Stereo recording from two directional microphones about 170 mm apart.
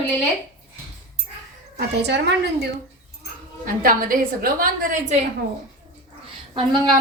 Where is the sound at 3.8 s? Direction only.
55° right (ahead or behind).